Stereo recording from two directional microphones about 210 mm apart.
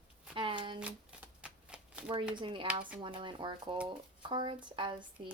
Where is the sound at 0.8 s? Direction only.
5° right (ahead or behind).